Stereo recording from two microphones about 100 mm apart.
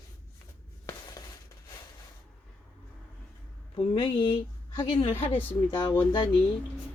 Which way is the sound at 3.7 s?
65° left (ahead or behind).